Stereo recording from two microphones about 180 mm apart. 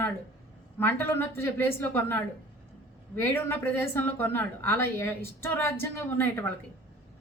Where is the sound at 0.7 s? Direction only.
10° left (ahead or behind).